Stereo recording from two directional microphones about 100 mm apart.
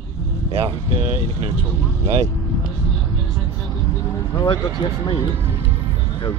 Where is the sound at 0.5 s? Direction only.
65° right (ahead or behind).